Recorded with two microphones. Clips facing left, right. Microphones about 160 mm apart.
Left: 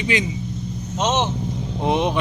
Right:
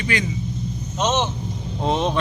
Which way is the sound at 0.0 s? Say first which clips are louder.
Left 2 dB; 20° left (ahead or behind).